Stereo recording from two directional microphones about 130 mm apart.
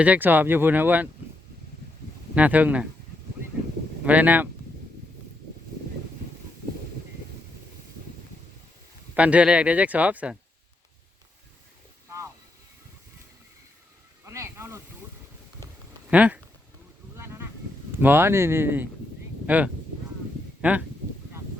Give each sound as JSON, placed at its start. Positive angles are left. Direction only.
{"t": 0.0, "sound": "speech", "side_deg": -15}
{"t": 2.3, "sound": "speech", "side_deg": -10}
{"t": 4.0, "sound": "speech", "side_deg": -10}
{"t": 9.1, "sound": "speech", "side_deg": -10}
{"t": 14.3, "sound": "a sound", "side_deg": -20}
{"t": 16.0, "sound": "speech", "side_deg": -10}
{"t": 17.2, "sound": "a sound", "side_deg": -20}
{"t": 18.0, "sound": "speech", "side_deg": -20}